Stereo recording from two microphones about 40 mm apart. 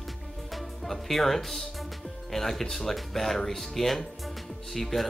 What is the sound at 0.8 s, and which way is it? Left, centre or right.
Speech, centre.